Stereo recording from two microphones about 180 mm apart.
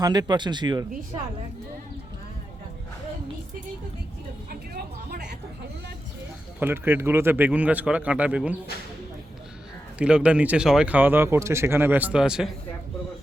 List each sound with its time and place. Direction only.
0.0 s speech: 25° right (ahead or behind)
4.4 s a sound: 60° right (ahead or behind)
6.6 s speech: 10° right (ahead or behind)
10.0 s speech: 5° right (ahead or behind)